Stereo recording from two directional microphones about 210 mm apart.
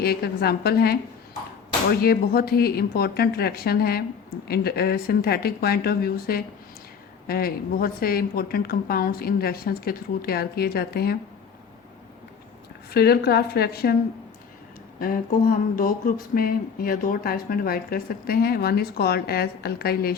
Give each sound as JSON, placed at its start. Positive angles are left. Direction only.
{"t": 0.0, "sound": "a woman's voice", "side_deg": 45}
{"t": 2.0, "sound": "a woman's voice", "side_deg": 45}
{"t": 12.9, "sound": "a woman's voice", "side_deg": 50}
{"t": 15.0, "sound": "a woman's voice", "side_deg": 45}